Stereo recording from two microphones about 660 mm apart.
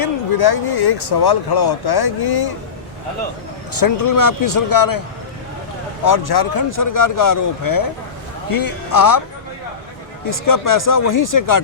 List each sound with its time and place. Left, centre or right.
0.0 s speech: left
3.8 s speech: left
6.1 s speech: left
10.2 s speech: left